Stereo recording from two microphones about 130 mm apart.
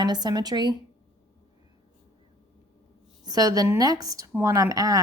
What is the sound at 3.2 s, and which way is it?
Speech, 30° right (ahead or behind).